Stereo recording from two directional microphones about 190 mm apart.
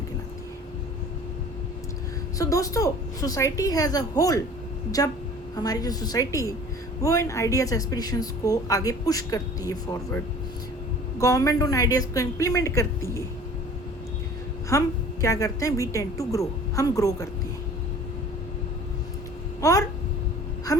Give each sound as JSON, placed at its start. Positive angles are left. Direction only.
{"t": 2.4, "sound": "a woman's voice", "side_deg": 15}
{"t": 11.2, "sound": "a woman's voice", "side_deg": 20}
{"t": 14.7, "sound": "a woman's voice", "side_deg": 15}
{"t": 19.6, "sound": "a woman's voice", "side_deg": 20}
{"t": 20.7, "sound": "a sound", "side_deg": 20}